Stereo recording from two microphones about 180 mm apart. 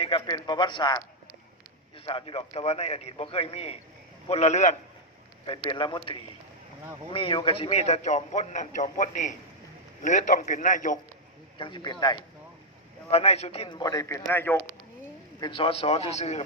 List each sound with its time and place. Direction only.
0.0 s a man's voice: 25° left (ahead or behind)
2.0 s a man's voice: 30° left (ahead or behind)
5.5 s a man's voice: 25° left (ahead or behind)
7.1 s a man's voice: 30° left (ahead or behind); by 10.9 s 45° left (ahead or behind)
11.5 s a man's voice: 25° left (ahead or behind)
13.1 s a man's voice: 35° left (ahead or behind); by 14.6 s 10° left (ahead or behind)
15.4 s a man's voice: 25° left (ahead or behind)